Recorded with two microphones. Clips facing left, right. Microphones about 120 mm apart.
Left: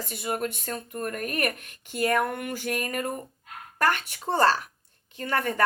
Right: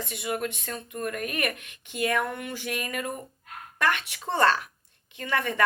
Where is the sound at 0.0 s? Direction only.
40° left (ahead or behind).